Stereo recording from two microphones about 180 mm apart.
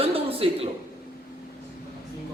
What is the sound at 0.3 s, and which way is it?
Speech, 30° right (ahead or behind).